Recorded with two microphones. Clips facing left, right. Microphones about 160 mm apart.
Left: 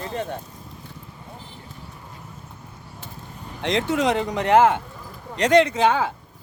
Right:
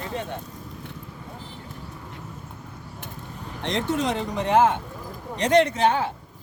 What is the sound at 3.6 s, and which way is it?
Speech, 90° left.